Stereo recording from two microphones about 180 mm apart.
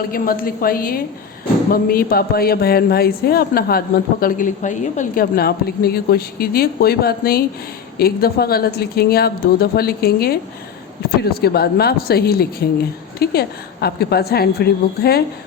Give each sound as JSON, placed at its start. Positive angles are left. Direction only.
{"t": 0.1, "sound": "a woman's voice", "side_deg": 55}